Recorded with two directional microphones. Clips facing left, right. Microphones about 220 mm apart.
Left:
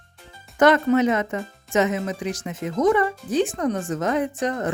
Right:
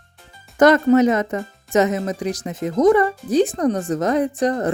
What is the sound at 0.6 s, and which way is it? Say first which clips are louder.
Speech: right 4 dB; 40° right (ahead or behind).